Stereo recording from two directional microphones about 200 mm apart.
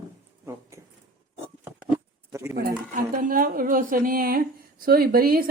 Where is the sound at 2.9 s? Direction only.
40° right (ahead or behind).